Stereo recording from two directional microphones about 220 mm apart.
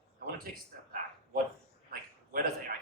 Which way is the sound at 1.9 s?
40° right (ahead or behind).